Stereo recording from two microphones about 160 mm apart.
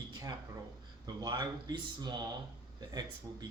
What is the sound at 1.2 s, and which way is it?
A man's voice, 25° right (ahead or behind).